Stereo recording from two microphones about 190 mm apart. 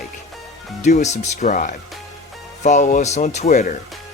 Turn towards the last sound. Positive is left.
turn(degrees=40)  # may be behind; listen again after turning